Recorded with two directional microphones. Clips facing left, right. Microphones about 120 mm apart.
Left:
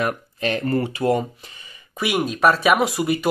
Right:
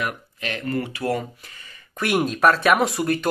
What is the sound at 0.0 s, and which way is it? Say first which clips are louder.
Speech: left 6 dB; 35° left (ahead or behind).